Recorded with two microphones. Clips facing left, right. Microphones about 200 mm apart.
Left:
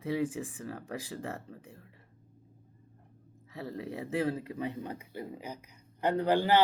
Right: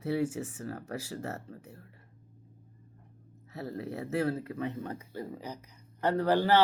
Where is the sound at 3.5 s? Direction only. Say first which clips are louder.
Right 1 dB; 40° right (ahead or behind).